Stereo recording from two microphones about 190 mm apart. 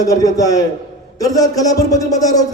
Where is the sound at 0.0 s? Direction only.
20° left (ahead or behind).